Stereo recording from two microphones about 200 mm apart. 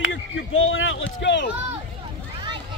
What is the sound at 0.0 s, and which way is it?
Speech, 75° left (ahead or behind).